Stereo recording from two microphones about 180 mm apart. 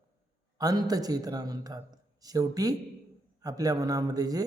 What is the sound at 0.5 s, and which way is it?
A man's voice, 20° right (ahead or behind).